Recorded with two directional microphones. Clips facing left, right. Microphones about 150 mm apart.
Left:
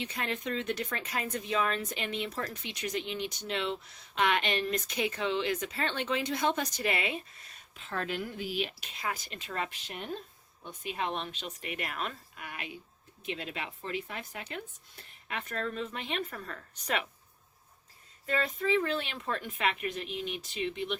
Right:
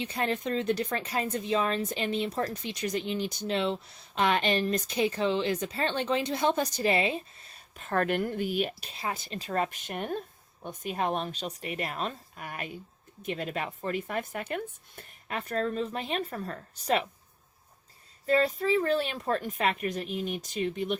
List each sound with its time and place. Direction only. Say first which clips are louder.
0.0 s a woman's voice: right 5 dB; 35° right (ahead or behind)
7.8 s a woman's voice: right 7 dB; 55° right (ahead or behind); by 17.1 s 35° right (ahead or behind)
18.3 s a woman's voice: right 5 dB; 35° right (ahead or behind)